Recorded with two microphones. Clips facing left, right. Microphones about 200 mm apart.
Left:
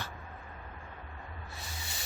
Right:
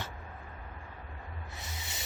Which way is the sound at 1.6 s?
20° right (ahead or behind).